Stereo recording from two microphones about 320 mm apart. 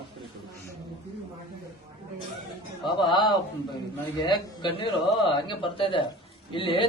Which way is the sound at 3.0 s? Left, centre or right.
Centre.